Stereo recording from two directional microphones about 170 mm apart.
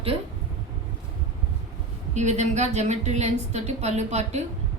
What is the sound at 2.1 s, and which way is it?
A woman's voice, 40° right (ahead or behind).